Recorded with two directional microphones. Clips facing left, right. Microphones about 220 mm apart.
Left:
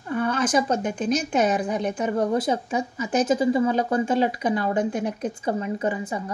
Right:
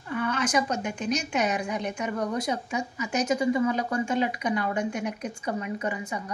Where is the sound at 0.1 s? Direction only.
35° left (ahead or behind).